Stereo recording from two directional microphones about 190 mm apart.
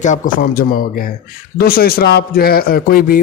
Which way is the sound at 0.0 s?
45° left (ahead or behind).